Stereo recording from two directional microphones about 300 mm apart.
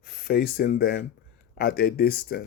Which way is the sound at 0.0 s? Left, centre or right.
Left.